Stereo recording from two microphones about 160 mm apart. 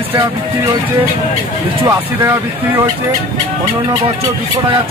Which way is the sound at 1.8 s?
15° right (ahead or behind).